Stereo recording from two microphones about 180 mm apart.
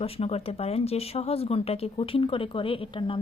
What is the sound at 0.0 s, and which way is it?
A woman's voice, 35° left (ahead or behind).